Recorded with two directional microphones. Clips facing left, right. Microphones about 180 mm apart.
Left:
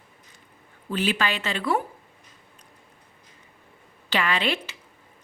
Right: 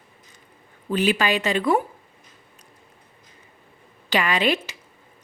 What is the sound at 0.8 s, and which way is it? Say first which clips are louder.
Speech: right 4 dB; 15° right (ahead or behind).